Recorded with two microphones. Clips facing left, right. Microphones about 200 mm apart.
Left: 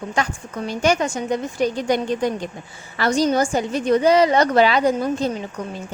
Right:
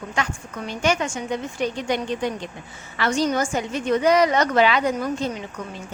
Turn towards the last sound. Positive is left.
turn(degrees=30)  # may be behind; listen again after turning